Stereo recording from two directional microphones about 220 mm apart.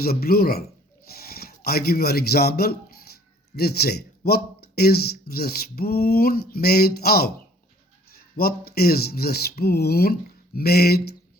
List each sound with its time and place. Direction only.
0.0 s speech: 45° left (ahead or behind)
8.4 s speech: 45° left (ahead or behind)